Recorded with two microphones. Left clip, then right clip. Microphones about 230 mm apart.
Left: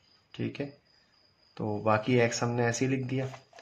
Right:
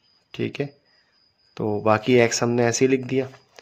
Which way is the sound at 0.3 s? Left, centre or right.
Right.